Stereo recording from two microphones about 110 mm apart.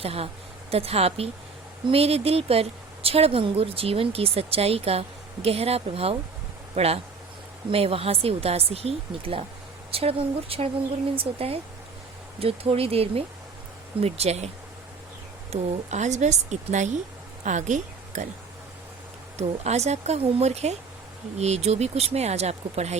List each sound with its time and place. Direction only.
0.0 s speech: 65° right (ahead or behind)
14.0 s speech: 75° right (ahead or behind)
15.5 s speech: 75° right (ahead or behind)
15.9 s a woman's voice: 90° right
19.4 s speech: 85° right